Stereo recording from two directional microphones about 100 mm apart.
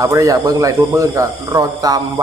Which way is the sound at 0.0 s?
35° right (ahead or behind).